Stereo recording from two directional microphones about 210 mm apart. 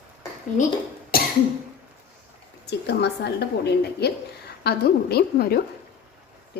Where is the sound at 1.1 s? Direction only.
45° left (ahead or behind).